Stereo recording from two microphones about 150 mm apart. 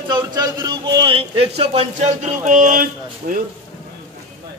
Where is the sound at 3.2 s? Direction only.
75° right (ahead or behind).